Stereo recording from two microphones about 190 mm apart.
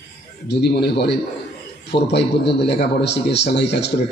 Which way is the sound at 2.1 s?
65° left (ahead or behind).